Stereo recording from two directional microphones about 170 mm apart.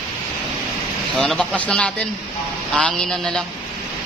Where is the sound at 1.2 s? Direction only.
5° left (ahead or behind).